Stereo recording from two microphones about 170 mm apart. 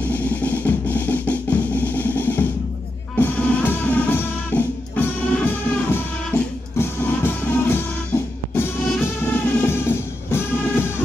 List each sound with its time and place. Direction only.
0.0 s music: 10° left (ahead or behind)